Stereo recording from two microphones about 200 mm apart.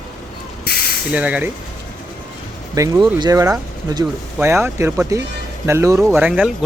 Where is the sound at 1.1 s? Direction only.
5° right (ahead or behind).